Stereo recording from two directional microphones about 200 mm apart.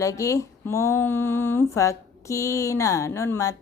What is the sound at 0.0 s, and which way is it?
Speech, 15° left (ahead or behind).